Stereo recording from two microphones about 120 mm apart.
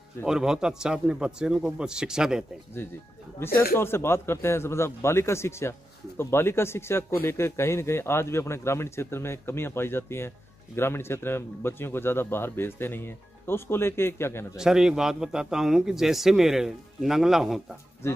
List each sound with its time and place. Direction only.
0.2 s a man's voice: 5° right (ahead or behind)
3.3 s speech: 20° left (ahead or behind)
14.6 s a man's voice: 5° right (ahead or behind)